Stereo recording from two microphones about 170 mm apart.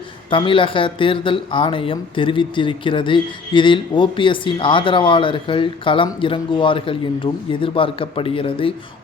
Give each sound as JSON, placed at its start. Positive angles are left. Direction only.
{"t": 0.3, "sound": "speech", "side_deg": 30}